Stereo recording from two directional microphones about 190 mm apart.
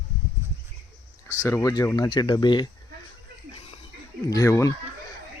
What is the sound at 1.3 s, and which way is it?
Speech, 15° left (ahead or behind).